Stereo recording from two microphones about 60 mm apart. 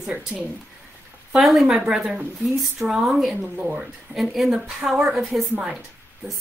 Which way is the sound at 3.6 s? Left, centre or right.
Centre.